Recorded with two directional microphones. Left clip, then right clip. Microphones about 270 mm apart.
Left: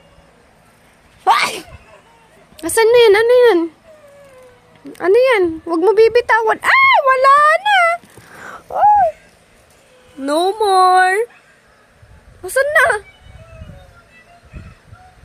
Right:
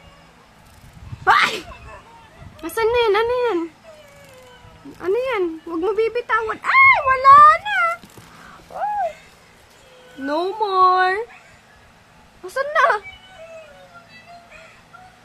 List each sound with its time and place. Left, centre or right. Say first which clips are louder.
1.2 s a sound: left 2 dB; centre
2.6 s a woman's voice: left 8 dB; centre
4.9 s a woman's voice: left 9 dB; left
8.7 s a sound: left 11 dB; left
10.2 s a woman's voice: left 7 dB; left
12.5 s a woman's voice: left 5 dB; centre